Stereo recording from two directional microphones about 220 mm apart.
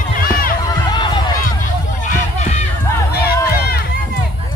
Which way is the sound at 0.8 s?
20° left (ahead or behind).